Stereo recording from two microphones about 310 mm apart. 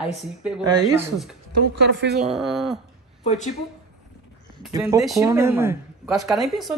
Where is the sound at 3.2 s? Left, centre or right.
Left.